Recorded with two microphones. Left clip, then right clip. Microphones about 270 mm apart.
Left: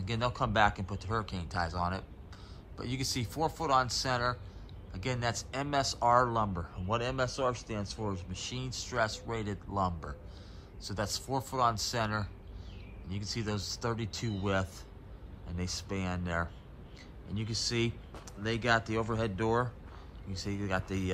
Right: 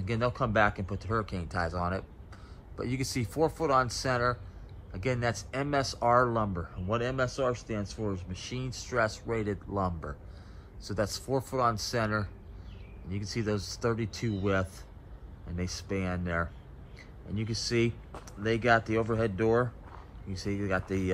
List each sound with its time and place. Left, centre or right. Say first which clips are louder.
0.0 s speech: right 2 dB; centre